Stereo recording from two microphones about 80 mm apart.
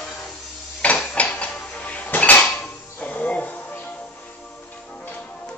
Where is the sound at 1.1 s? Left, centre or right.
Centre.